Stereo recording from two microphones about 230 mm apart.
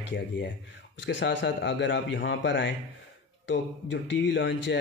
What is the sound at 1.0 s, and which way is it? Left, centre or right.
Speech, left.